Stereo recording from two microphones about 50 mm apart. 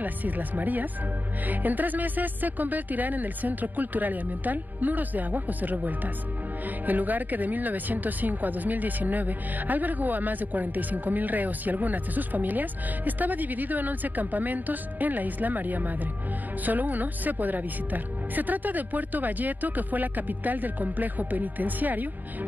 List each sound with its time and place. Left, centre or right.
0.0 s speech: right